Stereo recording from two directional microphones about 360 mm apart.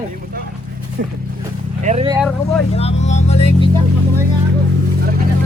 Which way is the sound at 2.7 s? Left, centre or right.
Centre.